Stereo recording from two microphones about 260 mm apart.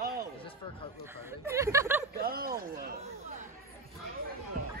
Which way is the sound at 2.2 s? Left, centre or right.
Right.